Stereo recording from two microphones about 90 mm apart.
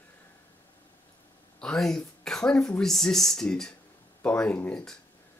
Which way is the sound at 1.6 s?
5° left (ahead or behind).